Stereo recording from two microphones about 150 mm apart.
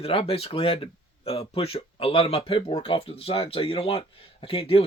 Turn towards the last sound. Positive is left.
turn(degrees=40)  # may be behind; listen again after turning